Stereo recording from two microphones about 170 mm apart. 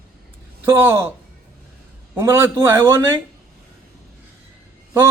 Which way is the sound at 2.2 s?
15° right (ahead or behind).